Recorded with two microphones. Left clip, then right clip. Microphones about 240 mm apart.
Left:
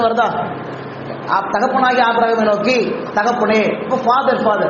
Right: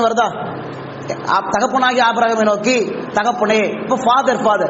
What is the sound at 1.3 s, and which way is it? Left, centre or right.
A woman's voice, right.